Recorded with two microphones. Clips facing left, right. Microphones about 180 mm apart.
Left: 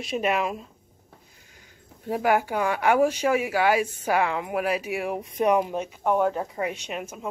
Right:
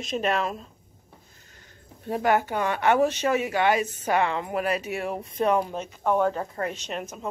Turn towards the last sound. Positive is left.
turn(degrees=5)  # may be behind; listen again after turning